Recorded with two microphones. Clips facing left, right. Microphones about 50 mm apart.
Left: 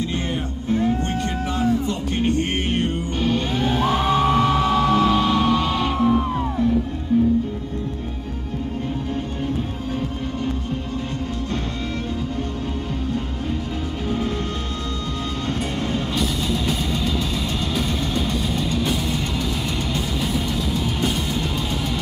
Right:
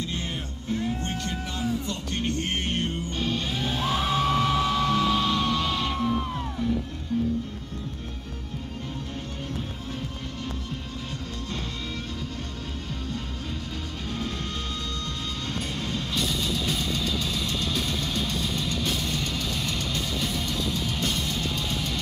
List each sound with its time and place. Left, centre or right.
0.7 s music: left
16.2 s music: centre